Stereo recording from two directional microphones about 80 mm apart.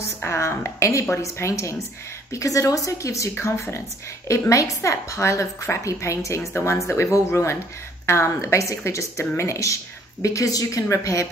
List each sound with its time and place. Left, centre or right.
0.2 s a woman's voice: left